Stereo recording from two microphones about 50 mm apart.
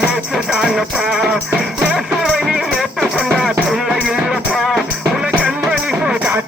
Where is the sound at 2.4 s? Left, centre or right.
Centre.